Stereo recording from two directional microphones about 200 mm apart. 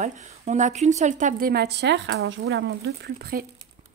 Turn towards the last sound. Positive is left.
turn(degrees=-50)  # may be behind; listen again after turning